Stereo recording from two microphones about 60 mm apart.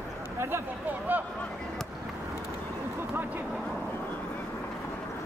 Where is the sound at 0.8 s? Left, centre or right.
Right.